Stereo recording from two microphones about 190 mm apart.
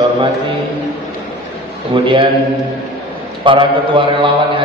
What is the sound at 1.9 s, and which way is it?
Speech, 25° right (ahead or behind).